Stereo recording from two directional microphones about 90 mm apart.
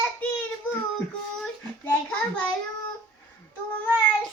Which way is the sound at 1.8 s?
20° left (ahead or behind).